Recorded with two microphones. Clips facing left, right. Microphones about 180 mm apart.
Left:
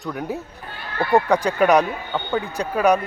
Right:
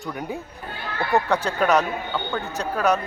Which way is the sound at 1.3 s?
10° left (ahead or behind).